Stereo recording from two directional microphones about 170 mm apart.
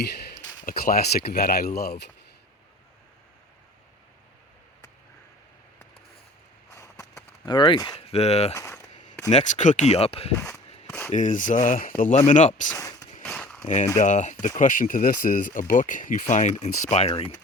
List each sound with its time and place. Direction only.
0.0 s speech: 70° left (ahead or behind)
6.7 s a sound: 20° left (ahead or behind)
7.4 s speech: 30° left (ahead or behind)
7.9 s speech: 40° left (ahead or behind)
8.5 s a sound: 20° left (ahead or behind)
9.3 s speech: 45° left (ahead or behind)
9.9 s speech: 35° left (ahead or behind)
11.1 s speech: 45° left (ahead or behind)
12.7 s speech: 20° left (ahead or behind)
13.2 s a sound: 5° left (ahead or behind)
14.0 s speech: 45° left (ahead or behind)